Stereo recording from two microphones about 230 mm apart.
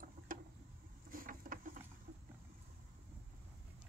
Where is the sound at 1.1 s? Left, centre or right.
Right.